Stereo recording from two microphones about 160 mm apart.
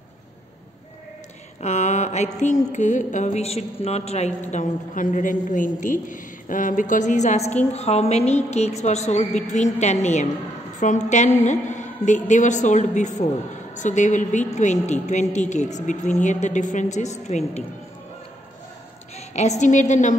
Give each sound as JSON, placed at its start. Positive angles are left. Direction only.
{"t": 1.6, "sound": "a woman's voice", "side_deg": 45}
{"t": 19.1, "sound": "a woman's voice", "side_deg": 45}